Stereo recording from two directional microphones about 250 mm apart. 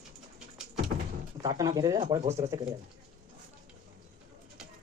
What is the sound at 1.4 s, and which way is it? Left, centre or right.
Speech, centre.